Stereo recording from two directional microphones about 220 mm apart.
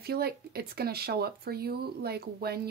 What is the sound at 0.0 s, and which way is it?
Speech, 45° right (ahead or behind).